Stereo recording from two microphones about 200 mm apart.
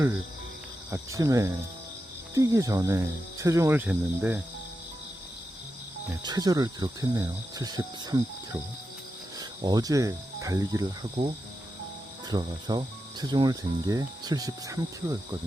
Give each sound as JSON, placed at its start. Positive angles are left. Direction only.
{"t": 0.9, "sound": "cricket", "side_deg": -15}
{"t": 6.2, "sound": "cricket", "side_deg": -20}
{"t": 9.4, "sound": "speech", "side_deg": -20}
{"t": 12.3, "sound": "cricket", "side_deg": -20}